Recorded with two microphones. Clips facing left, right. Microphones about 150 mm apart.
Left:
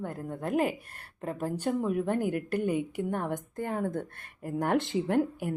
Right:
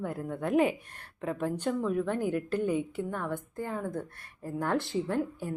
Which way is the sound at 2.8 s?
15° left (ahead or behind).